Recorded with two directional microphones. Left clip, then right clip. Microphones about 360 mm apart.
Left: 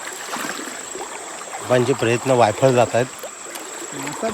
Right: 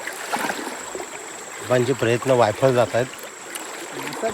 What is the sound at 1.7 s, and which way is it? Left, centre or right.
Speech, centre.